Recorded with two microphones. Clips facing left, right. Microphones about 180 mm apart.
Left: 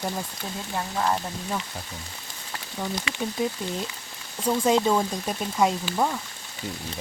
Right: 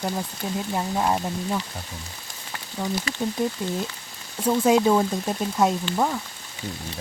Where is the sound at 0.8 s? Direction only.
15° right (ahead or behind).